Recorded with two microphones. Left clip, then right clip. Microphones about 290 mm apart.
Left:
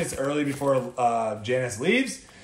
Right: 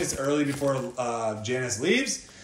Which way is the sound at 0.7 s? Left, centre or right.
Left.